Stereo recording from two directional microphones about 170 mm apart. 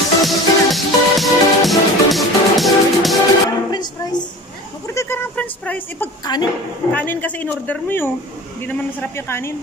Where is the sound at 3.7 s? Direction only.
25° left (ahead or behind).